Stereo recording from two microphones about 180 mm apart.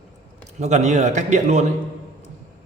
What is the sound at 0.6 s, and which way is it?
Speech, 40° right (ahead or behind).